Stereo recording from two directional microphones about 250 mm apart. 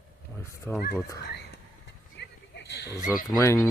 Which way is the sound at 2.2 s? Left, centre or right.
Left.